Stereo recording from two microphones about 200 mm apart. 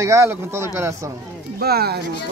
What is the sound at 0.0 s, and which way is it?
Speech, 15° right (ahead or behind).